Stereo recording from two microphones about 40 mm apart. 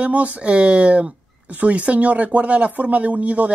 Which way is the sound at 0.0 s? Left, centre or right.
Right.